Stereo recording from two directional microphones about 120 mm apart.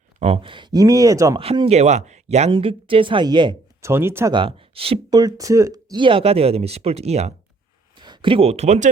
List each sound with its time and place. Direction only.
0.2 s speech: 50° right (ahead or behind); by 1.4 s 25° right (ahead or behind)
1.4 s speech: 50° right (ahead or behind); by 2.5 s 70° right (ahead or behind)
2.5 s a woman's voice: 50° right (ahead or behind)
3.8 s speech: 20° right (ahead or behind)
4.3 s speech: 45° right (ahead or behind)
5.1 s speech: 30° right (ahead or behind); by 7.3 s 60° right (ahead or behind)
8.0 s speech: 40° right (ahead or behind); by 8.9 s 75° right (ahead or behind)